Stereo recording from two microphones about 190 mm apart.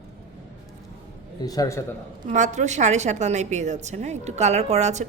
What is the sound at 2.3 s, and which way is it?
A woman's voice, 40° right (ahead or behind).